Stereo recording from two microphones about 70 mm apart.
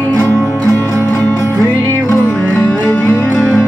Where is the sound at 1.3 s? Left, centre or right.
Left.